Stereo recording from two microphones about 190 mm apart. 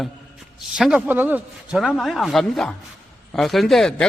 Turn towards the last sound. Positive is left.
turn(degrees=5)  # may be behind; listen again after turning